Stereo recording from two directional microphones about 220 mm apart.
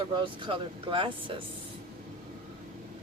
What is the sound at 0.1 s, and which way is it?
Speech, 20° right (ahead or behind).